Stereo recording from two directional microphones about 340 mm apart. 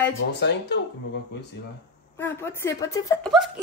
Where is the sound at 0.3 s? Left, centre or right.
Left.